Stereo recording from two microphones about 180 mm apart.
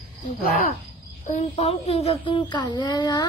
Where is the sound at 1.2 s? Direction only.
40° left (ahead or behind); by 3.3 s 25° left (ahead or behind).